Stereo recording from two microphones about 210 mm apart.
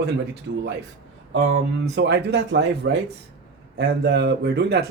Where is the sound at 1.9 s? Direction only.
55° right (ahead or behind).